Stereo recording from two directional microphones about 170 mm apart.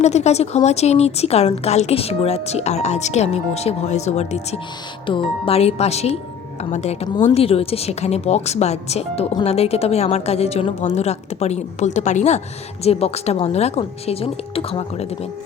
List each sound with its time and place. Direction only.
0.0 s speech: 40° left (ahead or behind)